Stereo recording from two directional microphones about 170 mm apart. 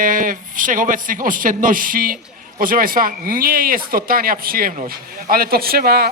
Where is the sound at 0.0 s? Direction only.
55° right (ahead or behind).